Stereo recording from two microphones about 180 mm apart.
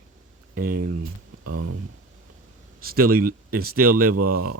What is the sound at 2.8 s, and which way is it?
Speech, 55° right (ahead or behind).